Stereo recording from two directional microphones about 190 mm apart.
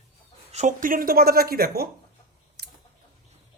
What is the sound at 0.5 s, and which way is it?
Speech, 40° right (ahead or behind).